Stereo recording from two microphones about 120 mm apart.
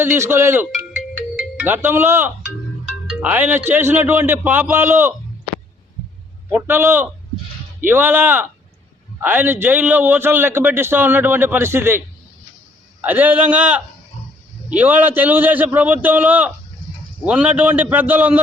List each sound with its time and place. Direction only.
0.0 s speech: 20° right (ahead or behind)
0.9 s music: 10° right (ahead or behind)
3.1 s a man's voice: 10° right (ahead or behind)
6.5 s a man's voice: 15° right (ahead or behind)